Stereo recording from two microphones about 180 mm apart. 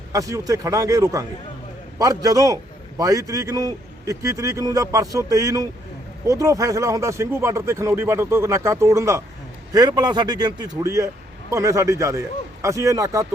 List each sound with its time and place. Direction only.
0.1 s a man's voice: 20° right (ahead or behind)